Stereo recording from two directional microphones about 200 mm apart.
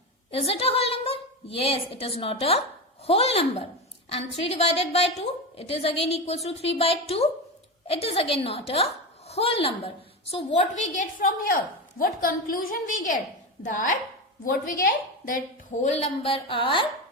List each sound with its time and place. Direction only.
0.3 s a woman's voice: 30° left (ahead or behind); by 15.4 s 45° left (ahead or behind)
15.8 s a woman's voice: 35° left (ahead or behind)